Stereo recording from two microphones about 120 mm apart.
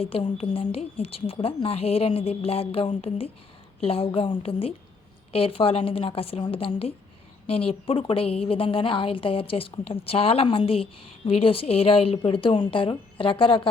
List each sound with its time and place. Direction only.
0.0 s a woman's voice: 50° left (ahead or behind)